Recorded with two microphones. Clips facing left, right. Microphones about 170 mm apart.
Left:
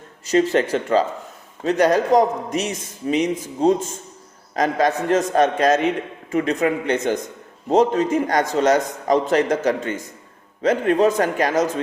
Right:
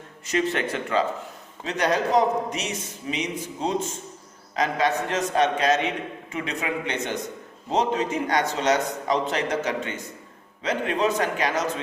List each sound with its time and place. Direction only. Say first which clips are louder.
0.3 s a man's voice: left 7 dB; 35° left (ahead or behind)